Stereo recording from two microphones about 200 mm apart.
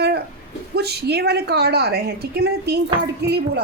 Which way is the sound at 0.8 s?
55° right (ahead or behind).